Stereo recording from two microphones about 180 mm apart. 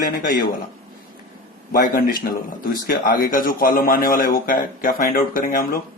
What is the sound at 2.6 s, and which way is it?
Speech, 55° left (ahead or behind).